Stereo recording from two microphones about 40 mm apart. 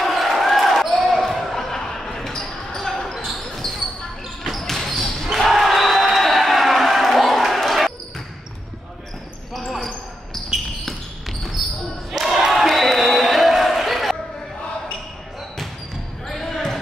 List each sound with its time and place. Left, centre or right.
0.0 s basketball bounce: centre
9.5 s basketball bounce: centre
12.1 s crowd: centre
16.3 s basketball bounce: centre